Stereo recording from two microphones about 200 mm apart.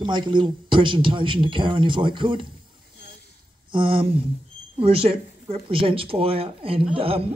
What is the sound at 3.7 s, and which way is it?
Speech, 25° right (ahead or behind).